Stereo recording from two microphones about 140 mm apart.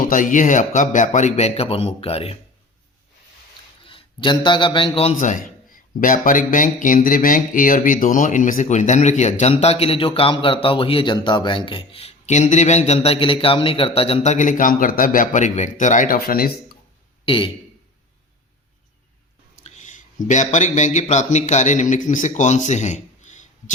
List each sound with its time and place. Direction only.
0.1 s speech: 70° left (ahead or behind); by 2.4 s 45° left (ahead or behind)
3.8 s a man's voice: 35° left (ahead or behind); by 5.4 s 55° left (ahead or behind)
6.0 s speech: 70° left (ahead or behind); by 16.7 s 90° left
17.2 s a man's voice: 40° left (ahead or behind)
19.5 s speech: 60° left (ahead or behind)